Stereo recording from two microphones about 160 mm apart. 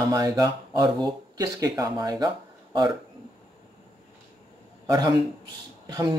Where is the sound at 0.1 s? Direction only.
25° right (ahead or behind).